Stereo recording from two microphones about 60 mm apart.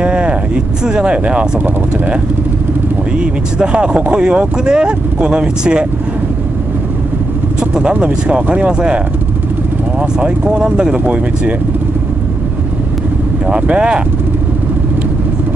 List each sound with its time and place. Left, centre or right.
0.0 s vehicle: centre
0.8 s speech: centre
3.2 s speech: centre
7.9 s speech: right
13.5 s speech: centre